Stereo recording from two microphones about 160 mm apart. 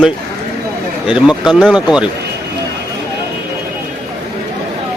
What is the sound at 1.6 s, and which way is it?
Speech, 5° right (ahead or behind).